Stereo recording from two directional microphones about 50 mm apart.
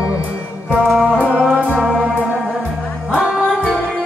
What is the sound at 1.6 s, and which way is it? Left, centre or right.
Music, right.